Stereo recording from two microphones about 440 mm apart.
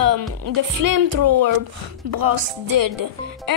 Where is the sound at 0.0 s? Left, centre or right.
Right.